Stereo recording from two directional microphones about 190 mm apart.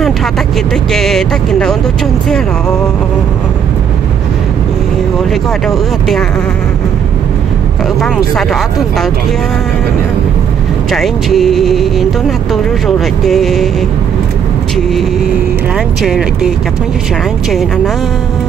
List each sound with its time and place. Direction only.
0.9 s speech: centre (ahead or behind)
5.3 s speech: centre (ahead or behind)
8.0 s speech: centre (ahead or behind)
10.9 s speech: centre (ahead or behind)
16.0 s speech: 5° right (ahead or behind)